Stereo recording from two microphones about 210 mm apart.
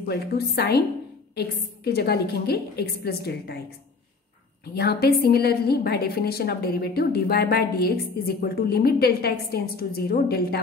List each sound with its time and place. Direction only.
0.1 s a woman's voice: 50° left (ahead or behind)
1.9 s a woman's voice: 50° left (ahead or behind)
4.7 s a woman's voice: 50° left (ahead or behind)